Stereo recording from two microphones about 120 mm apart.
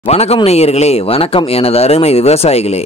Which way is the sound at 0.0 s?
60° left (ahead or behind).